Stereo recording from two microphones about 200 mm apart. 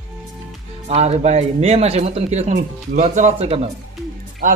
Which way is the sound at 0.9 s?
30° right (ahead or behind).